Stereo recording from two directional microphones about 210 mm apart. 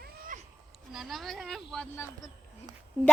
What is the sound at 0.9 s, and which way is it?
Speech, centre (ahead or behind).